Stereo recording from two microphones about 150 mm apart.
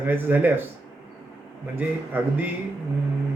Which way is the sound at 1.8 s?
10° right (ahead or behind).